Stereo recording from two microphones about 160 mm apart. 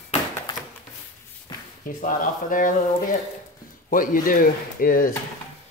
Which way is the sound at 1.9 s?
55° left (ahead or behind).